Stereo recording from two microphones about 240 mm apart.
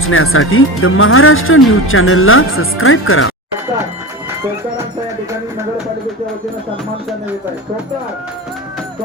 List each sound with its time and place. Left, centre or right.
0.0 s speech: left